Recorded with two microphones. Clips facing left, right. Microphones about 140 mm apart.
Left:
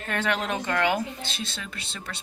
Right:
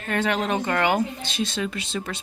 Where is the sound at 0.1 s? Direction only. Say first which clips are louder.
Right 4 dB; 35° right (ahead or behind).